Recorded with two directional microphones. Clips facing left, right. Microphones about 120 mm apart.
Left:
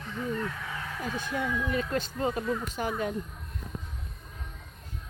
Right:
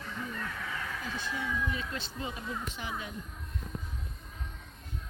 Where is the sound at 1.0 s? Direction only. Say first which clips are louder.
Left 9 dB; 50° left (ahead or behind).